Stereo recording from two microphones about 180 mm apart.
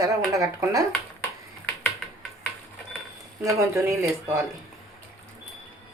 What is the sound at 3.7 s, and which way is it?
Speech, 15° right (ahead or behind).